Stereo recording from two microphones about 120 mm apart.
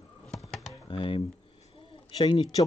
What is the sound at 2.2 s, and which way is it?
Speech, 45° left (ahead or behind).